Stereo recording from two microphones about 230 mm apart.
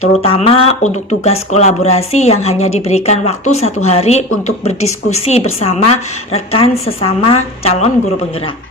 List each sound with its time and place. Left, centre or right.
0.2 s speech: left